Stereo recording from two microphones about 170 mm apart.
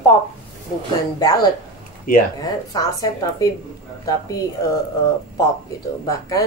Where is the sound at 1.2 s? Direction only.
20° left (ahead or behind).